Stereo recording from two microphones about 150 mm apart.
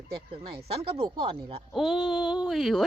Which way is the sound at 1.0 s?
30° right (ahead or behind).